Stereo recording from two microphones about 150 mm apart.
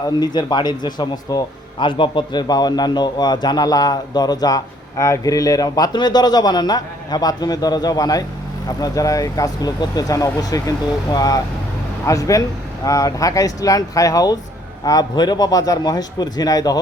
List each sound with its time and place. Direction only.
0.2 s a man's voice: 30° left (ahead or behind)